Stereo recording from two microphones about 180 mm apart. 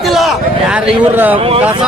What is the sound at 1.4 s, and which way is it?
Speech, 30° right (ahead or behind).